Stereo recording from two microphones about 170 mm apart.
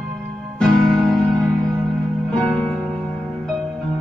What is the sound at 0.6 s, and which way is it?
Music, 5° left (ahead or behind).